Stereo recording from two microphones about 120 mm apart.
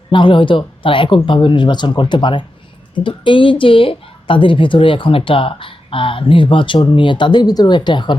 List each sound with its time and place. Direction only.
0.1 s a woman's voice: 45° left (ahead or behind)